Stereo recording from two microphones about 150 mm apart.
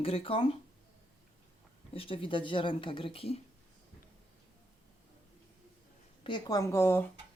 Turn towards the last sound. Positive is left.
turn(degrees=15)  # may be behind; listen again after turning